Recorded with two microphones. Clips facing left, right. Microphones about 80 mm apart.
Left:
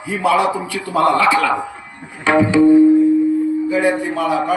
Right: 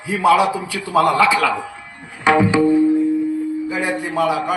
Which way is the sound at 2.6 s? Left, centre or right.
Left.